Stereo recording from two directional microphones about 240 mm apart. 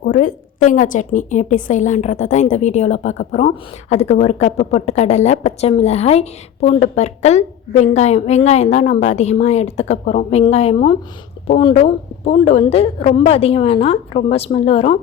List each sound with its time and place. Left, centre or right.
0.0 s a woman's voice: left